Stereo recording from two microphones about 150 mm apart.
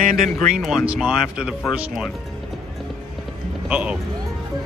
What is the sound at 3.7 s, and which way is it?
Speech, 10° right (ahead or behind).